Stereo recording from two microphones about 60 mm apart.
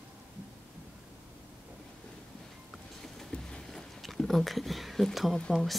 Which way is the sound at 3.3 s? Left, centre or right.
Left.